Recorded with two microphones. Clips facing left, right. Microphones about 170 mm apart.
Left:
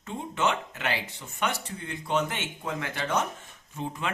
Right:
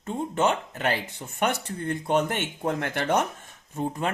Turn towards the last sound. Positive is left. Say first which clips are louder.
# right 5 dB
turn(degrees=-45)  # may be behind; listen again after turning